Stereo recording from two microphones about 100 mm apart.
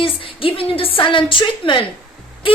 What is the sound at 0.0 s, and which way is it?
A woman's voice, 65° left (ahead or behind).